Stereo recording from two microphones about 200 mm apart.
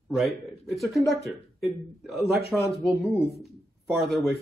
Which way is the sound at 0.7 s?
Centre (ahead or behind).